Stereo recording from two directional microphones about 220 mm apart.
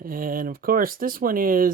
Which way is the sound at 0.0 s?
40° right (ahead or behind).